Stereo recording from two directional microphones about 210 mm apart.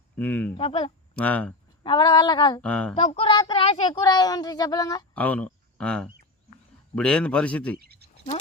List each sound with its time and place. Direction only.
0.2 s speech: 5° left (ahead or behind)
0.5 s a woman's voice: 25° left (ahead or behind)
1.1 s speech: 5° left (ahead or behind)
1.8 s a woman's voice: 20° left (ahead or behind)
2.6 s a man's voice: 5° left (ahead or behind)
2.9 s a woman's voice: 25° left (ahead or behind)
5.1 s a man's voice: 5° left (ahead or behind)
7.8 s a sound: 50° right (ahead or behind)